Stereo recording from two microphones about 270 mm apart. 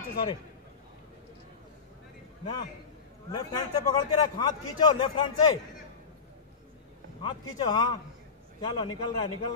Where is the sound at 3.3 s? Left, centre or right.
Centre.